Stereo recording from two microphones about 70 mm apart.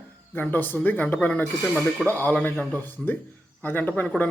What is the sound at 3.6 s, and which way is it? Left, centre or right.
Speech, left.